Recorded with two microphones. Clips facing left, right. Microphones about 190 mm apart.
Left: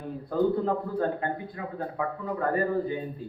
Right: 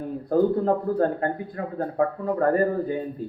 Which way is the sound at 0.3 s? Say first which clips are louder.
Right 5 dB; 45° right (ahead or behind).